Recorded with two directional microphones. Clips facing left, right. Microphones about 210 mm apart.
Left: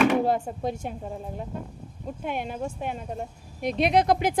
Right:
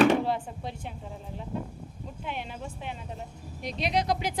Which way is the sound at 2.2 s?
50° left (ahead or behind).